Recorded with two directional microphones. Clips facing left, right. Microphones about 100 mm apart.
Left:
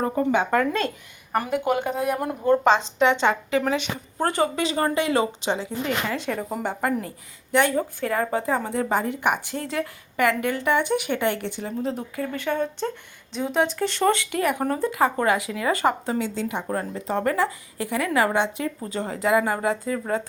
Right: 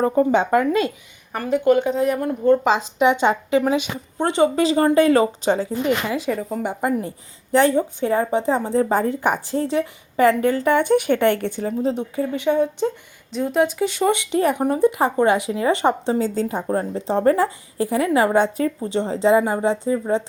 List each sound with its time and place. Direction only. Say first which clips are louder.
0.0 s speech: right 5 dB; 30° right (ahead or behind)
1.4 s speech: right 6 dB; 10° left (ahead or behind)
2.6 s speech: right 1 dB; 10° right (ahead or behind)
4.5 s a woman's voice: right 7 dB; 35° right (ahead or behind)
6.1 s speech: right 4 dB; 5° right (ahead or behind)
7.5 s a woman's voice: right 5 dB; 30° right (ahead or behind)
11.8 s speech: right 5 dB; 25° right (ahead or behind)
12.3 s speech: right 7 dB; 15° right (ahead or behind)
13.3 s speech: right 4 dB; 5° right (ahead or behind); by 16.2 s 25° right (ahead or behind)
16.2 s a woman's voice: right 5 dB; 40° right (ahead or behind)
16.7 s a woman's voice: right 6 dB; 30° right (ahead or behind)
18.3 s a woman's voice: right 6 dB; 40° right (ahead or behind)
18.8 s speech: right 6 dB; 25° right (ahead or behind)